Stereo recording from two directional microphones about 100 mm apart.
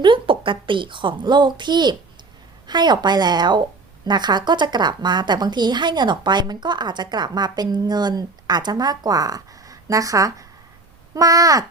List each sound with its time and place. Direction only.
0.0 s a woman's voice: 55° right (ahead or behind); by 11.6 s 35° right (ahead or behind)